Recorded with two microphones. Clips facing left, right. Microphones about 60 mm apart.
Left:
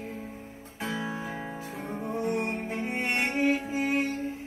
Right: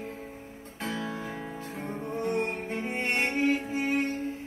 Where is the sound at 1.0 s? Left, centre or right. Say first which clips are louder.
Left 1 dB; left.